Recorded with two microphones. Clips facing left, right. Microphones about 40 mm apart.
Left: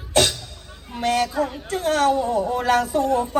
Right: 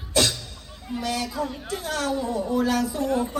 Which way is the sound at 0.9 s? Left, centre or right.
Left.